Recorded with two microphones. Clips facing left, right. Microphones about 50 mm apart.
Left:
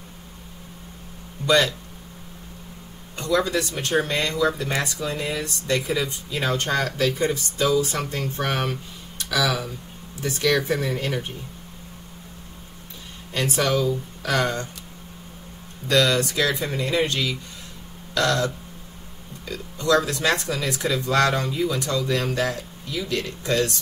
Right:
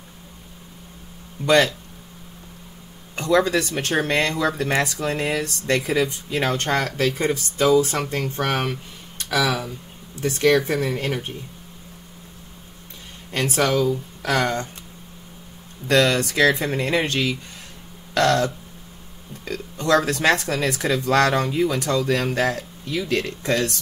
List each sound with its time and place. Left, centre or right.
1.4 s speech: right
3.2 s speech: right
13.3 s speech: right
15.9 s speech: right
18.1 s throat clearing: right
19.4 s speech: right